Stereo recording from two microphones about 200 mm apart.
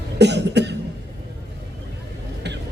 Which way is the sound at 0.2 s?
55° right (ahead or behind).